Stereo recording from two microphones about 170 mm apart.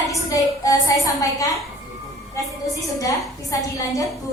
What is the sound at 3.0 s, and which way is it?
A woman's voice, 20° left (ahead or behind).